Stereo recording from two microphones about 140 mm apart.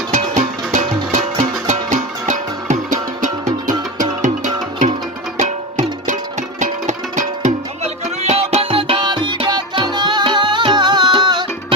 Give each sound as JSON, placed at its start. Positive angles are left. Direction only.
{"t": 0.1, "sound": "music", "side_deg": -55}
{"t": 3.4, "sound": "music", "side_deg": -25}
{"t": 4.2, "sound": "music", "side_deg": -60}
{"t": 6.6, "sound": "music", "side_deg": -60}
{"t": 8.2, "sound": "music", "side_deg": -50}